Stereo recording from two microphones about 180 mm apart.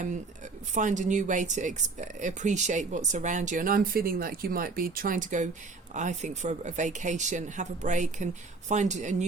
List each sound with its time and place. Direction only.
0.7 s speech: 45° right (ahead or behind)